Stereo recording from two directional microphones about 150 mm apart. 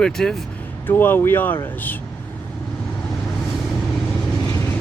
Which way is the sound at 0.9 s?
15° left (ahead or behind).